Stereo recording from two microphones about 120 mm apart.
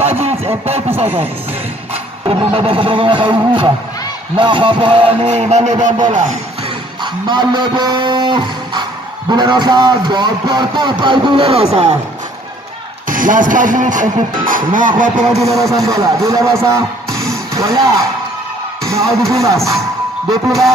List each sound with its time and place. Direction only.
0.0 s a sound: 55° right (ahead or behind)
2.2 s speech: 50° right (ahead or behind); by 5.9 s 85° right
7.2 s a man's voice: 40° right (ahead or behind); by 12.0 s 65° right (ahead or behind)
13.1 s speech: 90° right
15.4 s speech: 25° right (ahead or behind)
19.2 s speech: 25° right (ahead or behind)